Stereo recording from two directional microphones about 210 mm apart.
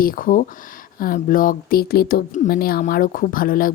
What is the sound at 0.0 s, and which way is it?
Speech, 40° left (ahead or behind).